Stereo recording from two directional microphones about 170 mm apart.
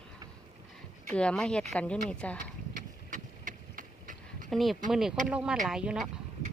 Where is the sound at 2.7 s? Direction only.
50° right (ahead or behind).